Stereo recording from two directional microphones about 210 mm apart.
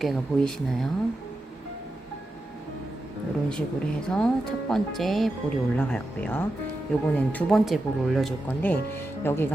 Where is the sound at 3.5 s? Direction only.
5° left (ahead or behind).